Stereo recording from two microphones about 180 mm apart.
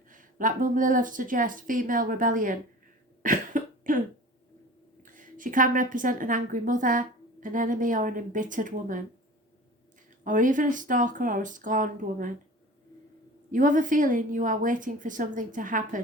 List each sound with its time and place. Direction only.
0.1 s speech: 50° right (ahead or behind)
3.2 s cough: 50° right (ahead or behind)
5.0 s a woman's voice: 50° right (ahead or behind)
10.2 s speech: 45° right (ahead or behind)
13.5 s speech: 45° right (ahead or behind)